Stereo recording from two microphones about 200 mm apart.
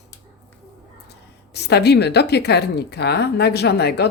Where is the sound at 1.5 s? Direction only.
55° left (ahead or behind).